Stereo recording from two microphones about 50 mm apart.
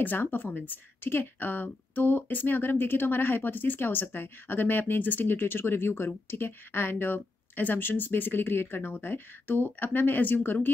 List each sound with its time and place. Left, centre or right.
0.3 s a woman's voice: left